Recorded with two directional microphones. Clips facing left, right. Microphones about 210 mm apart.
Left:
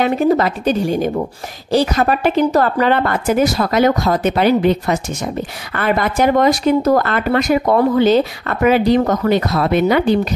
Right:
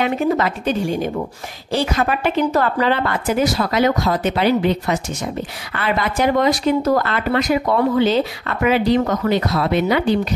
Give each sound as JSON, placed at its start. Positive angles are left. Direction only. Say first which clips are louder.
{"t": 0.0, "sound": "a woman's voice", "louder": "left 4 dB", "side_deg": 35}
{"t": 2.8, "sound": "speech", "louder": "left 3 dB", "side_deg": 50}